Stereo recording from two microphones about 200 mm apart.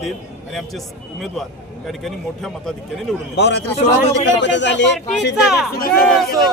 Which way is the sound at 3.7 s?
30° left (ahead or behind).